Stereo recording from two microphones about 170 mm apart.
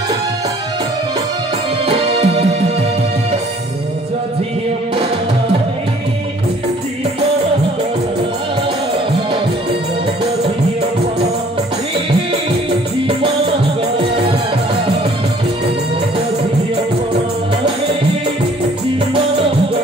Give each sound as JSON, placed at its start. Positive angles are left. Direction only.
{"t": 1.9, "sound": "music", "side_deg": -35}